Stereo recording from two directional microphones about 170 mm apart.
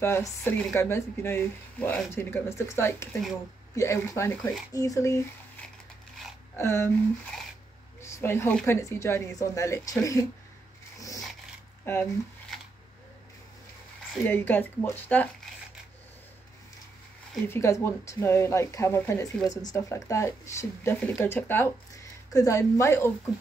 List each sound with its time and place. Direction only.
0.0 s speech: 15° left (ahead or behind)
0.4 s speech: 5° left (ahead or behind)
6.5 s speech: 15° left (ahead or behind)
8.0 s a sound: 15° left (ahead or behind)
8.6 s speech: 15° left (ahead or behind)
11.8 s speech: 15° left (ahead or behind)
14.2 s speech: 10° left (ahead or behind)
17.5 s speech: 15° left (ahead or behind)